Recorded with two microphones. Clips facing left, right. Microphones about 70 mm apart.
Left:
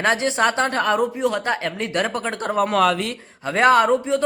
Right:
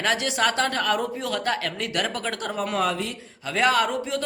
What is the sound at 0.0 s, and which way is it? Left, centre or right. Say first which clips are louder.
A man's voice: left 4 dB; left.